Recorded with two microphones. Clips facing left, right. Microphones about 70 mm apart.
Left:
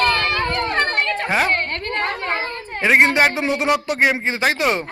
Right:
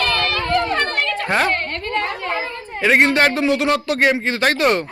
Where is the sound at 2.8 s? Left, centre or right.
Centre.